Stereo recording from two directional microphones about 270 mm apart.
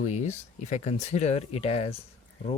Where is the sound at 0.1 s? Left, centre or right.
Left.